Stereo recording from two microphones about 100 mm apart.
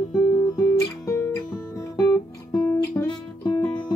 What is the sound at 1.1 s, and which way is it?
Music, 35° left (ahead or behind).